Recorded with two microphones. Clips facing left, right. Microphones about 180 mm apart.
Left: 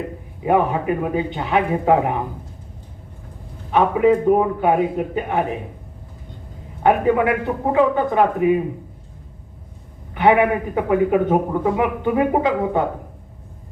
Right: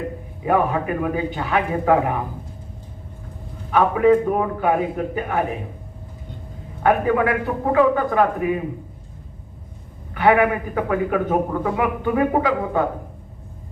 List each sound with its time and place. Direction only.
0.4 s a man's voice: 20° left (ahead or behind)
3.7 s a man's voice: 20° left (ahead or behind)
6.8 s a man's voice: 25° left (ahead or behind)
10.2 s a man's voice: 20° left (ahead or behind)